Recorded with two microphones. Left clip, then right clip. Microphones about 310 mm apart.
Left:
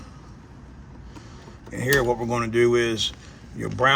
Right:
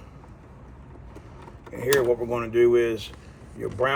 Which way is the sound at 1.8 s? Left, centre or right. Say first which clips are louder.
Even; left.